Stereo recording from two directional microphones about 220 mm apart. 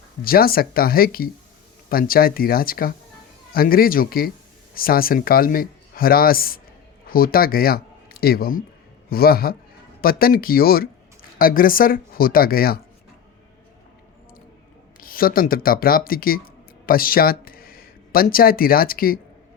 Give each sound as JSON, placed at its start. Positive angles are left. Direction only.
{"t": 0.3, "sound": "speech", "side_deg": 40}
{"t": 15.0, "sound": "speech", "side_deg": 40}